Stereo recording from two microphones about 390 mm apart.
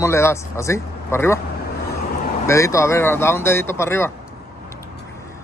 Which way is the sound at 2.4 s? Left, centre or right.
Centre.